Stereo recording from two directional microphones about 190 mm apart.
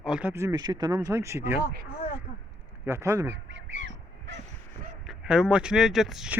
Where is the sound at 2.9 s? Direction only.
15° right (ahead or behind).